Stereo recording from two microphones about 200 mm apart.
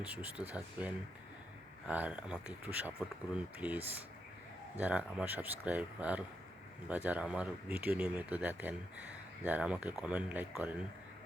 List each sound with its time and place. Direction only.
0.0 s speech: 5° right (ahead or behind)